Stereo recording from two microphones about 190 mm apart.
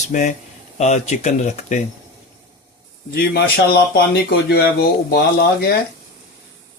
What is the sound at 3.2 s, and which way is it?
Speech, 55° left (ahead or behind).